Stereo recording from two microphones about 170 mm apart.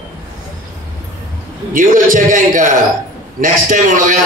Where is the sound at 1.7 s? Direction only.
50° right (ahead or behind).